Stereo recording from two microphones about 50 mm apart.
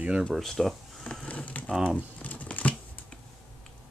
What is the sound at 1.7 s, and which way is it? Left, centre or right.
Speech, centre.